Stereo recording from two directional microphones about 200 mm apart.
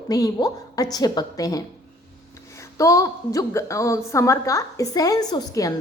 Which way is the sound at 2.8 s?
15° left (ahead or behind).